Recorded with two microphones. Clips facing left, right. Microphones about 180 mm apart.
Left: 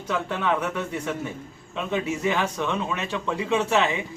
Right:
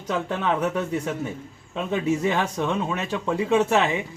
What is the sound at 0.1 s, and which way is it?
A man's voice, 40° right (ahead or behind).